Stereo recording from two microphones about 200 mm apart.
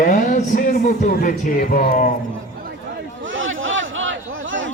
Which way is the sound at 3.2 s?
75° right (ahead or behind).